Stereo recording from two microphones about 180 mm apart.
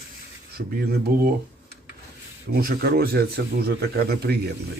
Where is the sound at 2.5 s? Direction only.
60° right (ahead or behind).